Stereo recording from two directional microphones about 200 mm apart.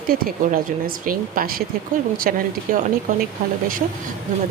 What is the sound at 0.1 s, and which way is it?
Speech, 45° right (ahead or behind).